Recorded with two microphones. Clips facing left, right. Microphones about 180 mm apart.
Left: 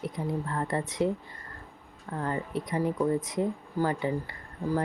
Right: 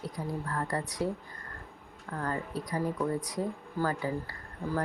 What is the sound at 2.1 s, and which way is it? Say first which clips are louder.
Speech: left 3 dB; 20° left (ahead or behind).